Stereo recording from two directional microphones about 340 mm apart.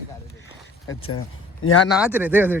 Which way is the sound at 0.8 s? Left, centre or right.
Left.